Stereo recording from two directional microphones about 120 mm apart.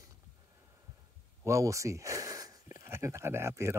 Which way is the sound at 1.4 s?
25° right (ahead or behind).